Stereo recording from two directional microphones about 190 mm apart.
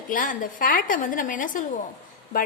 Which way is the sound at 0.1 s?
45° left (ahead or behind).